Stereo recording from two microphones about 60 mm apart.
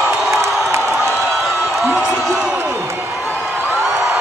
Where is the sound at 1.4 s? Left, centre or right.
Centre.